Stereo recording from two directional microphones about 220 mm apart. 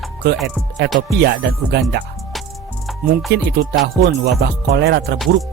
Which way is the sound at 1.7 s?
50° right (ahead or behind).